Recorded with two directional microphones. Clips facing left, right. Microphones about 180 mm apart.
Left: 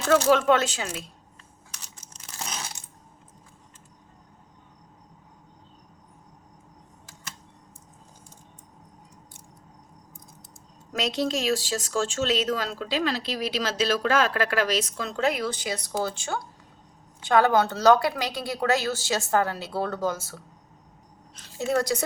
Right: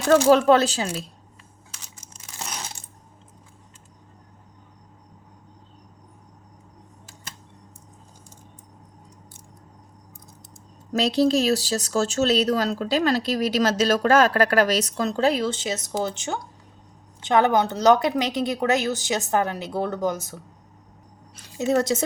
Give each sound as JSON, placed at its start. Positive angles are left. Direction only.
{"t": 0.1, "sound": "speech", "side_deg": -35}
{"t": 10.9, "sound": "a woman's voice", "side_deg": -35}